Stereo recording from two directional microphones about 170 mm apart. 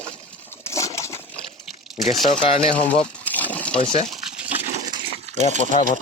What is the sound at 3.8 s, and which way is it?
Speech, 30° left (ahead or behind).